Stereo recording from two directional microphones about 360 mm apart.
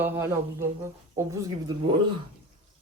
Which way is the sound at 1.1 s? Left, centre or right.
Centre.